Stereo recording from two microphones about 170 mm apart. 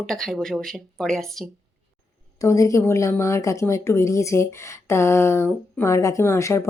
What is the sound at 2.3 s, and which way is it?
A woman's voice, 20° left (ahead or behind).